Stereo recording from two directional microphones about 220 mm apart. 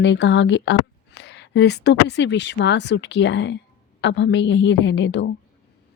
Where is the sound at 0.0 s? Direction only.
50° left (ahead or behind).